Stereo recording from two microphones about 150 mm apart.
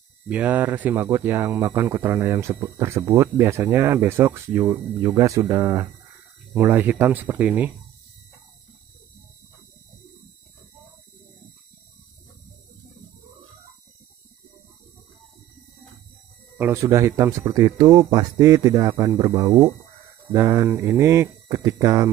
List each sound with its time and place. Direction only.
0.3 s speech: 10° right (ahead or behind)
16.5 s speech: 15° right (ahead or behind)